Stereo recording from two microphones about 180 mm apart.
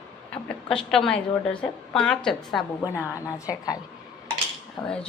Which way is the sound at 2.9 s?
15° left (ahead or behind).